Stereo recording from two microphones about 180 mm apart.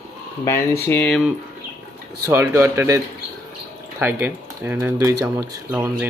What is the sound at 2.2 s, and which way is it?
Speech, 15° right (ahead or behind).